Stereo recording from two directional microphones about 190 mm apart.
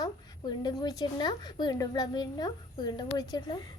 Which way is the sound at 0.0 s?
20° left (ahead or behind).